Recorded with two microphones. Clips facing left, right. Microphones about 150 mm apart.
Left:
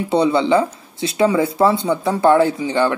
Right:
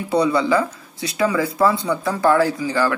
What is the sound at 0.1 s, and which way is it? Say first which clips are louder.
Speech: left 2 dB; 25° left (ahead or behind).